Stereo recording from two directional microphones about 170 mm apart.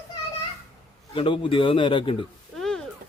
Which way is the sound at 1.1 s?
30° left (ahead or behind).